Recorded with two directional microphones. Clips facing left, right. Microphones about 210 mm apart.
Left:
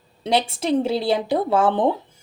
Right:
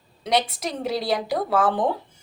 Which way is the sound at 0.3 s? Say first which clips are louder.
Left 4 dB; 30° left (ahead or behind).